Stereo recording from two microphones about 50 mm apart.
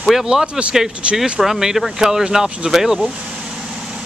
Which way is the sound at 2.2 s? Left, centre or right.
Centre.